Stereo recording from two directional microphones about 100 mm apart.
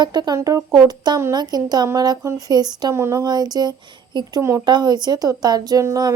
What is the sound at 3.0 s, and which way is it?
Speech, 30° right (ahead or behind).